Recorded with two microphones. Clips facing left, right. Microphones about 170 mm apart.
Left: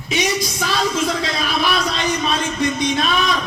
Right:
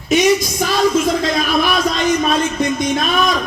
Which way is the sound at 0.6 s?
50° right (ahead or behind).